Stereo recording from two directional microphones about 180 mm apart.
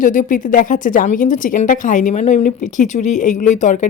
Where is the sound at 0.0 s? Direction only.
45° left (ahead or behind).